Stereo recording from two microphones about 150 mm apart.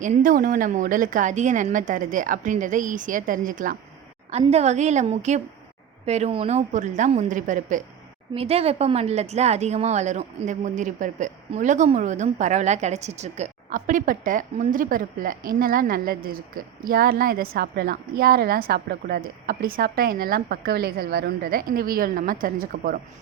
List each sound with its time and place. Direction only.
0.0 s a woman's voice: 65° right (ahead or behind)
4.3 s speech: 45° right (ahead or behind)
8.3 s a woman's voice: 40° right (ahead or behind); by 23.0 s 75° right (ahead or behind)